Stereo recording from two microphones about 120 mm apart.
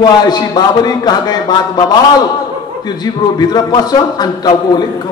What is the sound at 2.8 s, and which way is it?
A man's voice, 35° left (ahead or behind).